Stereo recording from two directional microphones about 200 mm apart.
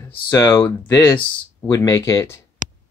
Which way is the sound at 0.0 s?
15° left (ahead or behind).